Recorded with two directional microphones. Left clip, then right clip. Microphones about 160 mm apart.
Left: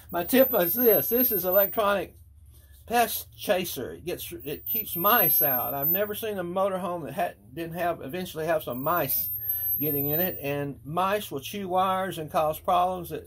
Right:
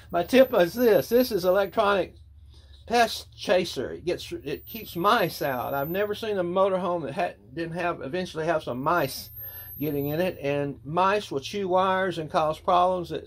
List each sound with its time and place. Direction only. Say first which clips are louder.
0.1 s speech: right 3 dB; 35° right (ahead or behind)